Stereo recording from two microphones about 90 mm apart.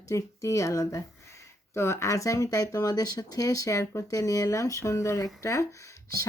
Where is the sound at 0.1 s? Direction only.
35° left (ahead or behind).